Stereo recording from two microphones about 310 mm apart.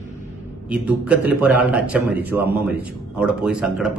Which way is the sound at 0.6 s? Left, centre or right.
Centre.